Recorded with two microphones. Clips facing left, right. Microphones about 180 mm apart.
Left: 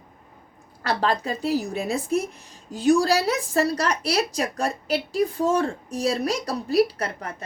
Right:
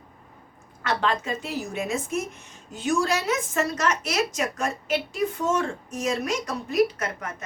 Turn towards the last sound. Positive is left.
turn(degrees=35)  # may be behind; listen again after turning